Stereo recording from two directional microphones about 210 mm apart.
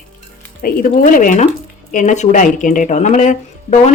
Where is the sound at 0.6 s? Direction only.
40° left (ahead or behind).